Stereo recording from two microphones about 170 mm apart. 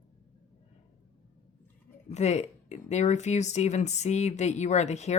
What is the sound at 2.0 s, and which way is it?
Speech, 40° left (ahead or behind).